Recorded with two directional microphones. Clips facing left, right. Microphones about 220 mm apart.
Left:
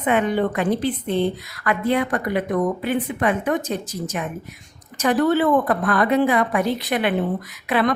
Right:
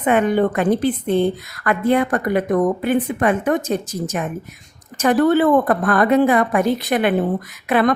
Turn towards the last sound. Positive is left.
turn(degrees=-50)  # may be behind; listen again after turning